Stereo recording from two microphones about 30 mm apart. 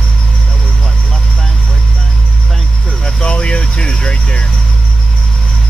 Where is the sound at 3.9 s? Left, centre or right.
Left.